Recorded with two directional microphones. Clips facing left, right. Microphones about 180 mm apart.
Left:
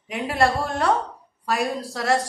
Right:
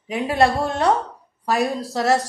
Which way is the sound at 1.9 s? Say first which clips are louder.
Right 3 dB; 25° right (ahead or behind).